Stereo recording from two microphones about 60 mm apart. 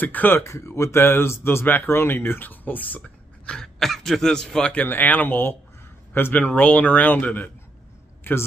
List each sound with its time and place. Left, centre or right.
0.0 s speech: left
0.4 s speech: left
1.0 s speech: left
3.0 s speech: centre
4.8 s a man's voice: left
8.2 s a sound: left